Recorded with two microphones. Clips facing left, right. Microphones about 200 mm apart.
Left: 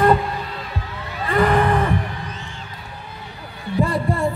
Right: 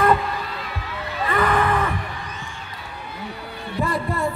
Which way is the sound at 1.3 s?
30° left (ahead or behind).